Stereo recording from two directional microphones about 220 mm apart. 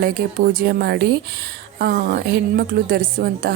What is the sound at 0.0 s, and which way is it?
A woman's voice, 45° right (ahead or behind).